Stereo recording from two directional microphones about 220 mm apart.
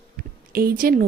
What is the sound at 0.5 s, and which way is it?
Speech, 40° right (ahead or behind).